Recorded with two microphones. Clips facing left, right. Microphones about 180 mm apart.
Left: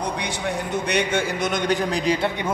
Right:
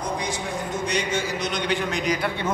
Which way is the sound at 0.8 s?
60° left (ahead or behind).